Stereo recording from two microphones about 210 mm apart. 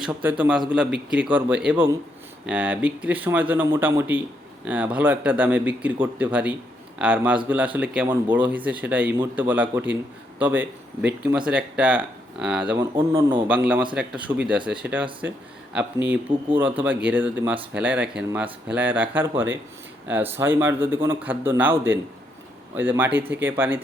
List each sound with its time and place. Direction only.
0.0 s speech: 10° right (ahead or behind)